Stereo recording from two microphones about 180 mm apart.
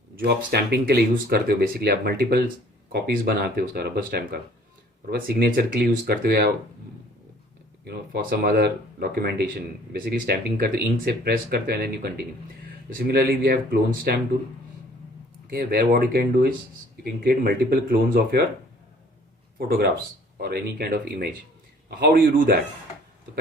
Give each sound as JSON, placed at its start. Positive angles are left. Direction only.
{"t": 0.2, "sound": "speech", "side_deg": -65}
{"t": 7.9, "sound": "speech", "side_deg": -55}
{"t": 15.4, "sound": "speech", "side_deg": -55}
{"t": 19.5, "sound": "a man's voice", "side_deg": -60}